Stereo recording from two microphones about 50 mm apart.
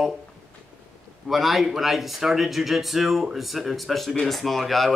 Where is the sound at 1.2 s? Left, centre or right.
Centre.